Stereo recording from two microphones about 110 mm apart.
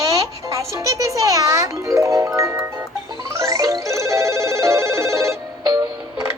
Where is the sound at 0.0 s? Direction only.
30° right (ahead or behind).